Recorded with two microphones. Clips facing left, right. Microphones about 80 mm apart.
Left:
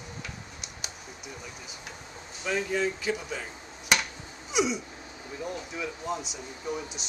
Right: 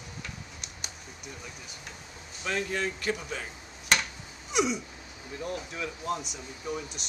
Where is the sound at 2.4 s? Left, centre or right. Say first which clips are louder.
Left 3 dB; centre.